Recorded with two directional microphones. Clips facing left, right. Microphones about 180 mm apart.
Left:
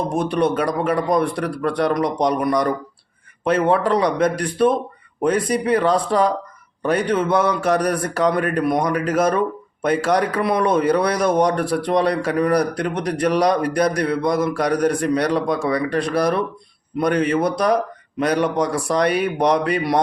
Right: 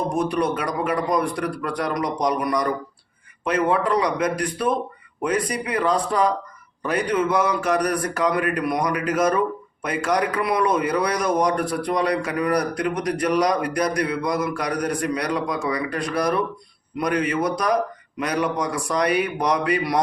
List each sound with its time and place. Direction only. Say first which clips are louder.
0.2 s a man's voice: left 5 dB; 30° left (ahead or behind)